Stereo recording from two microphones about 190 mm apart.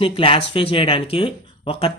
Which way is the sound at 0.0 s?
30° left (ahead or behind).